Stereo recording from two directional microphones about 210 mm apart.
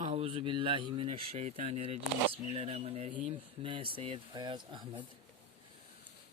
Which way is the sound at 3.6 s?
25° right (ahead or behind).